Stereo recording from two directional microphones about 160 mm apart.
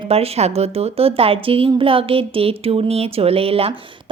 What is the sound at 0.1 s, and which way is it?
A woman's voice, 40° right (ahead or behind).